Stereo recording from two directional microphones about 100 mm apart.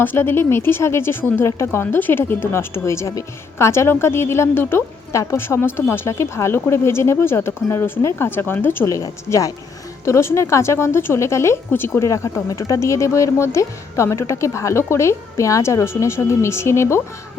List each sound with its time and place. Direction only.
0.0 s speech: 20° left (ahead or behind)